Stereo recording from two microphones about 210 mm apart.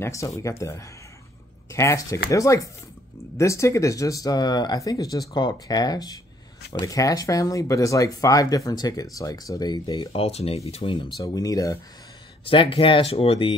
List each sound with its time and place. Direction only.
0.0 s speech: 15° left (ahead or behind)